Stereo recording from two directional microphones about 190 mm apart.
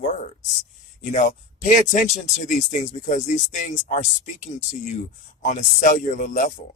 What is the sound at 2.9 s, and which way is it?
Speech, 40° left (ahead or behind).